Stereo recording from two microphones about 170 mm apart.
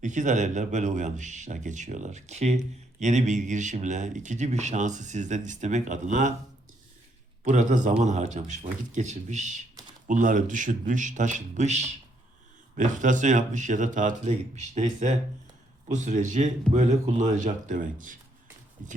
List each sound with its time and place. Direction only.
0.0 s speech: 45° right (ahead or behind)
7.4 s speech: 45° right (ahead or behind)